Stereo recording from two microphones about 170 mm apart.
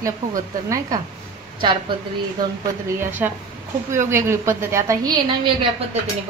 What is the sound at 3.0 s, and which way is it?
A woman's voice, 10° right (ahead or behind).